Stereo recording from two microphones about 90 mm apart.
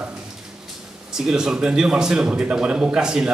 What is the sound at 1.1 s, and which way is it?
Speech, 5° right (ahead or behind).